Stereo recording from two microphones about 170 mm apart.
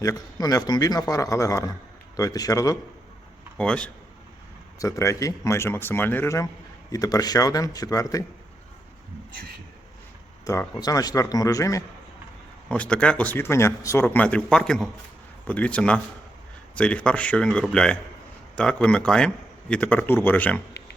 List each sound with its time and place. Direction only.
0.0 s a man's voice: 20° left (ahead or behind)
3.6 s a man's voice: 5° left (ahead or behind)
4.8 s a man's voice: 20° left (ahead or behind)
10.4 s a man's voice: 20° left (ahead or behind)
12.6 s a man's voice: 5° left (ahead or behind)